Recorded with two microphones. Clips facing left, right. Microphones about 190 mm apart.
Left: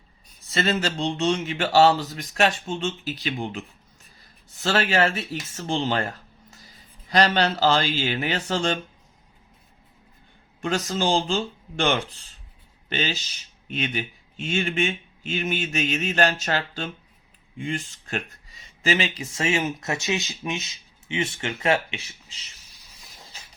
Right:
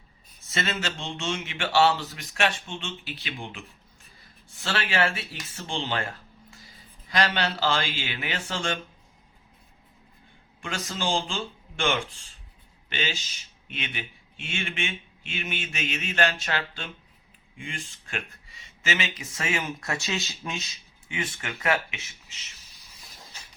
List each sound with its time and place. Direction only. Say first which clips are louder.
0.5 s speech: left 6 dB; 35° left (ahead or behind)
4.6 s speech: left 5 dB; 40° left (ahead or behind)
10.6 s speech: left 7 dB; 40° left (ahead or behind)